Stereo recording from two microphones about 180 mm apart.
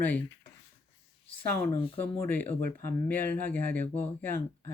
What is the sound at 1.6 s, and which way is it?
Speech, 10° left (ahead or behind).